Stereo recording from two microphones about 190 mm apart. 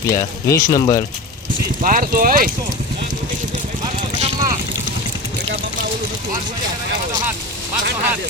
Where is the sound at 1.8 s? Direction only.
50° right (ahead or behind).